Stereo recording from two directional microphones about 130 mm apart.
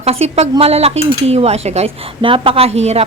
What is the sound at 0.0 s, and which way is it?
Speech, 50° right (ahead or behind).